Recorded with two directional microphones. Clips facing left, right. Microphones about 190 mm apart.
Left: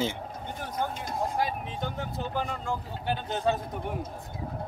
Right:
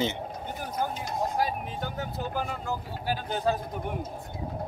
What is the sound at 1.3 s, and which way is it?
Vehicle, 5° right (ahead or behind).